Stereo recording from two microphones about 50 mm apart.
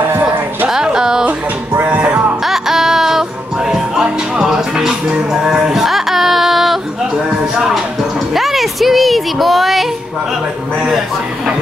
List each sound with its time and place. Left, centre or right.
0.7 s music: centre
1.9 s music: right
2.4 s music: centre
7.5 s speech: centre
8.4 s a sound: centre